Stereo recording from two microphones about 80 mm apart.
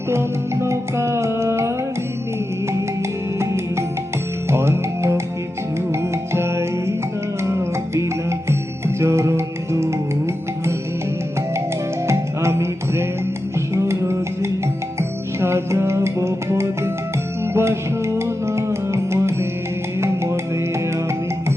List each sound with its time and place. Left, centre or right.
0.1 s music: right
3.3 s music: right
12.0 s music: right